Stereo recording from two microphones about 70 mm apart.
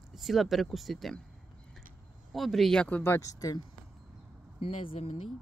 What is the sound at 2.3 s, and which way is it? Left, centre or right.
Speech, centre.